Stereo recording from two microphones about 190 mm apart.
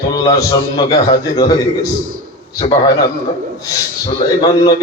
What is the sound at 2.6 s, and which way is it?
Speech, 30° left (ahead or behind).